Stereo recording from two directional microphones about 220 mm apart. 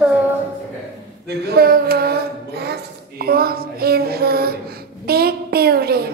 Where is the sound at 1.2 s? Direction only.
45° right (ahead or behind).